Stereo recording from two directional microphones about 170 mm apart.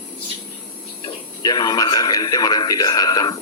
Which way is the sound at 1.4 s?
25° left (ahead or behind).